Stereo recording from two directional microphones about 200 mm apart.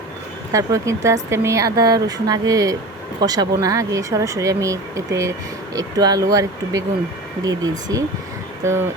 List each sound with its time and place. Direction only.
0.5 s speech: 15° right (ahead or behind)